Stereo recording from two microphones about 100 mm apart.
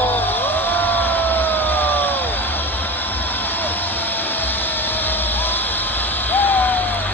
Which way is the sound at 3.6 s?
20° left (ahead or behind).